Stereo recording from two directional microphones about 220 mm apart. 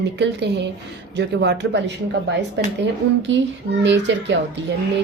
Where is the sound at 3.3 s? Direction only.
55° right (ahead or behind).